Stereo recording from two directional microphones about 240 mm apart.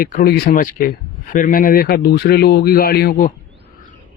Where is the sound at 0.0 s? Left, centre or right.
Left.